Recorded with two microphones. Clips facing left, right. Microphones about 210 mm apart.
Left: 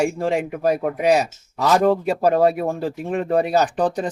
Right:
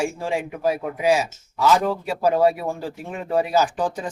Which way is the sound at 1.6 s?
65° left (ahead or behind).